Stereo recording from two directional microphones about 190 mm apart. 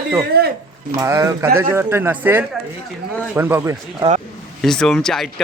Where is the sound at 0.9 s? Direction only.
15° right (ahead or behind).